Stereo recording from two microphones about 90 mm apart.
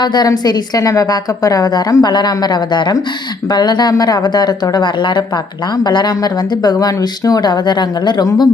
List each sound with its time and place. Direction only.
0.0 s a woman's voice: 55° left (ahead or behind)
4.9 s a woman's voice: 60° left (ahead or behind)